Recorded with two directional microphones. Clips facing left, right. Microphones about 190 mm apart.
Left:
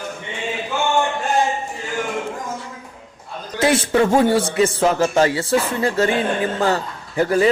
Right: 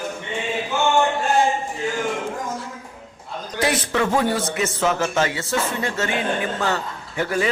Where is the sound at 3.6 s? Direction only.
25° left (ahead or behind).